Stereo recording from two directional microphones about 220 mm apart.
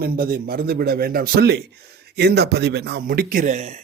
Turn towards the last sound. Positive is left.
turn(degrees=-35)  # may be behind; listen again after turning